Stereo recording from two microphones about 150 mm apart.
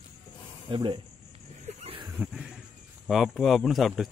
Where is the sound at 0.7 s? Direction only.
35° right (ahead or behind).